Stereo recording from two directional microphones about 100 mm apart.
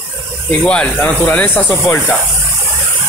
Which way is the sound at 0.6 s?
10° left (ahead or behind).